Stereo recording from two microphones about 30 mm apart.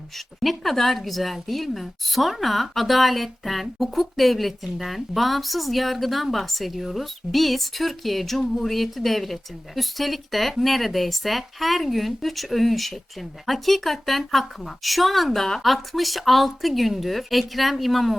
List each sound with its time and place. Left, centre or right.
0.4 s a woman's voice: centre